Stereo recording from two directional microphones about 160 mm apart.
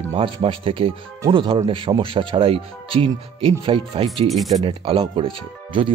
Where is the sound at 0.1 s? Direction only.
35° right (ahead or behind).